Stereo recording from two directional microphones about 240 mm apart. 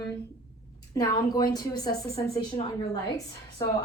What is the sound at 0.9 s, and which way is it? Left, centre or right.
A woman's voice, centre.